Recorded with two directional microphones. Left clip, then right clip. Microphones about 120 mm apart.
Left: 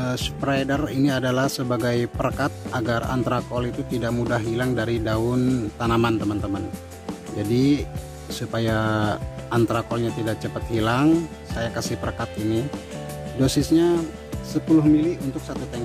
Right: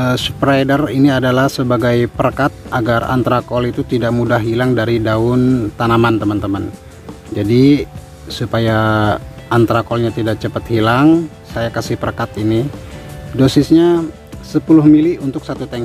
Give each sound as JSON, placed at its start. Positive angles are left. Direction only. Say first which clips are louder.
{"t": 0.0, "sound": "speech", "louder": "right 11 dB", "side_deg": 15}